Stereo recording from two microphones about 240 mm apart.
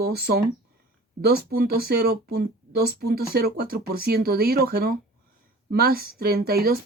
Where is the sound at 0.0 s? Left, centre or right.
Right.